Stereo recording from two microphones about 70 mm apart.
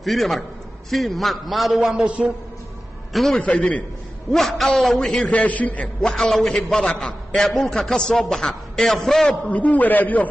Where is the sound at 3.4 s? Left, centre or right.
Centre.